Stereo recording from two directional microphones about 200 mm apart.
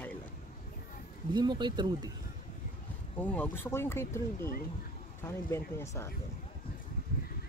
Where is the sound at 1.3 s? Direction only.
20° right (ahead or behind).